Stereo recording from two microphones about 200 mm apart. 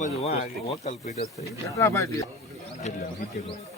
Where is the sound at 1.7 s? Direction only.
15° left (ahead or behind).